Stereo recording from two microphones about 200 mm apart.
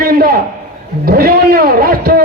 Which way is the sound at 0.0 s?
50° right (ahead or behind).